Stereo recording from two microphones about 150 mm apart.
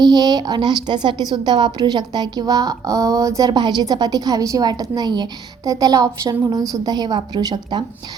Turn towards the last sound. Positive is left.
turn(degrees=-30)  # may be behind; listen again after turning